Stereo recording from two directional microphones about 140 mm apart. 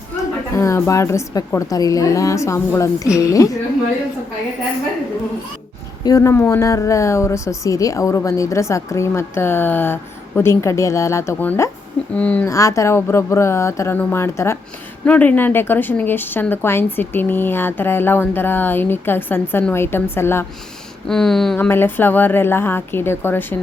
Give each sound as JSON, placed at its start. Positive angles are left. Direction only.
{"t": 0.5, "sound": "speech", "side_deg": 20}
{"t": 6.1, "sound": "a woman's voice", "side_deg": 20}
{"t": 12.5, "sound": "a woman's voice", "side_deg": 20}
{"t": 21.1, "sound": "a woman's voice", "side_deg": 5}